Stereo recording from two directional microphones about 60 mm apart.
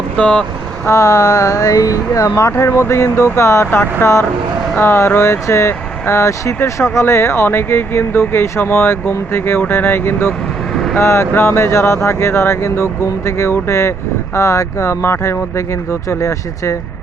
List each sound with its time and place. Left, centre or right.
0.2 s speech: centre
0.9 s speech: left
2.3 s speech: left